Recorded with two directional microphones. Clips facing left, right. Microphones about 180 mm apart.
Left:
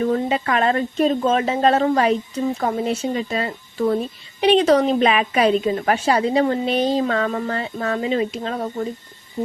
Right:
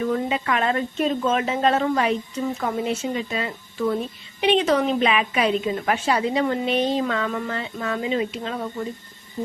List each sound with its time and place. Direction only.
0.0 s a woman's voice: 35° left (ahead or behind)